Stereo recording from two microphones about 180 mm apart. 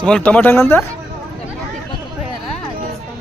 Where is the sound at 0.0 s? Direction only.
5° left (ahead or behind).